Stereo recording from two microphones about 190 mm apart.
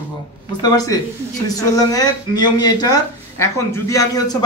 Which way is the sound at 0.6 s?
20° left (ahead or behind).